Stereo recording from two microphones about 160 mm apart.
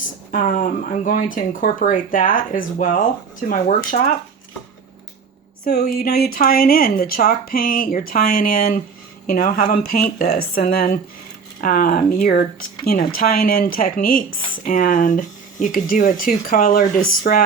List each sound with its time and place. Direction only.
0.3 s a woman's voice: 55° left (ahead or behind)
5.6 s a woman's voice: 75° left (ahead or behind)